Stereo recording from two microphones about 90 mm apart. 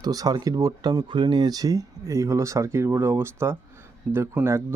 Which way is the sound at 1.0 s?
60° right (ahead or behind).